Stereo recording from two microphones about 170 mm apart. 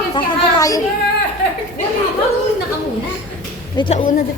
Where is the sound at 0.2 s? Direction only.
20° left (ahead or behind).